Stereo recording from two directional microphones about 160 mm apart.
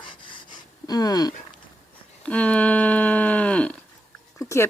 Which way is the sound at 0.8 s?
25° left (ahead or behind).